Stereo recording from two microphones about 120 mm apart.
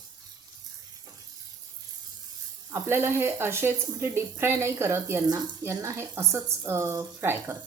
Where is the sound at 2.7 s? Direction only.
20° right (ahead or behind).